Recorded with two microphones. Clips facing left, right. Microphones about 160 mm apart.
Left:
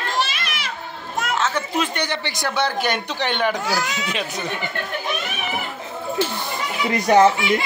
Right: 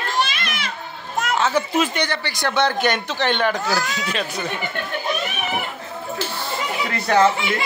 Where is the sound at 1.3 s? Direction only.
10° right (ahead or behind).